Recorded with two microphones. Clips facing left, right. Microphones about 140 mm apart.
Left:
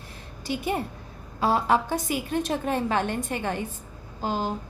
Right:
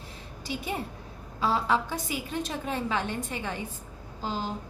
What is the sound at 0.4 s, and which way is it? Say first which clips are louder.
A woman's voice: left 5 dB; 55° left (ahead or behind).